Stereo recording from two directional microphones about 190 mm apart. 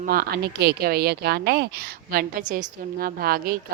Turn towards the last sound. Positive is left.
turn(degrees=-50)  # may be behind; listen again after turning